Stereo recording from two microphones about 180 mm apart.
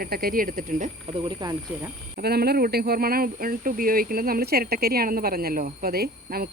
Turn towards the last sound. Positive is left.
turn(degrees=-60)  # may be behind; listen again after turning